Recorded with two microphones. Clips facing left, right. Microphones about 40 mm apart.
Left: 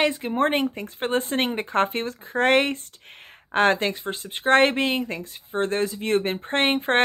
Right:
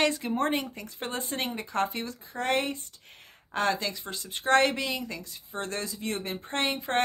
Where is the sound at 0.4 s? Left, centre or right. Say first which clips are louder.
Left 10 dB; left.